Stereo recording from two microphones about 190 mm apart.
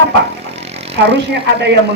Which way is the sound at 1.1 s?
65° right (ahead or behind).